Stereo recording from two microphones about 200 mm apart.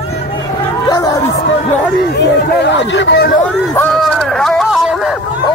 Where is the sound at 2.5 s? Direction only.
60° left (ahead or behind).